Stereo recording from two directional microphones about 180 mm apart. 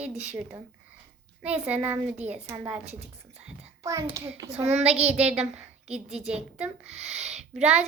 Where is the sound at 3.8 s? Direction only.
15° right (ahead or behind).